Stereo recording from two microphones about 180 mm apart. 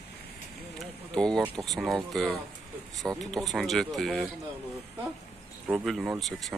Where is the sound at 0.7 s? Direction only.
5° left (ahead or behind).